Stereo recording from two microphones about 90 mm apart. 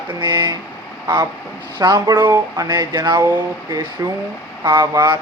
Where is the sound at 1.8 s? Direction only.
45° right (ahead or behind).